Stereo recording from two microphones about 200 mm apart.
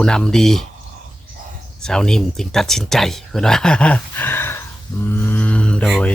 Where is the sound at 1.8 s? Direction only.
5° left (ahead or behind).